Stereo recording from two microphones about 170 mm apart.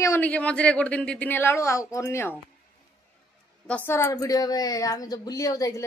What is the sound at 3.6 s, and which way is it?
Speech, 10° left (ahead or behind).